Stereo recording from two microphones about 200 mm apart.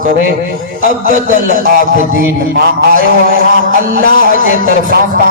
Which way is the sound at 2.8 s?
50° right (ahead or behind).